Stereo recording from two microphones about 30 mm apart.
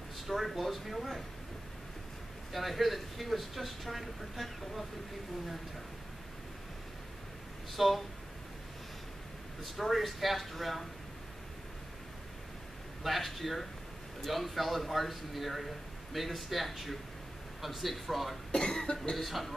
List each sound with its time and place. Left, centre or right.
0.3 s a man's voice: centre
2.5 s a man's voice: centre
7.7 s a man's voice: centre
9.6 s a man's voice: centre
13.0 s a man's voice: centre
18.5 s cough: left
19.1 s a man's voice: centre